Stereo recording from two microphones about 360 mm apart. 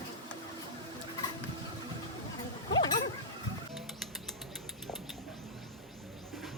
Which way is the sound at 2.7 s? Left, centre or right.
Centre.